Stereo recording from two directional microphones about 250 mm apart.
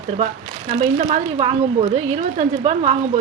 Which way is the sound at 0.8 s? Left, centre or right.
Right.